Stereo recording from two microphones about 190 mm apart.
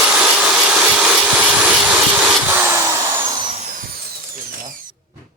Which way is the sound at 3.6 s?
45° right (ahead or behind).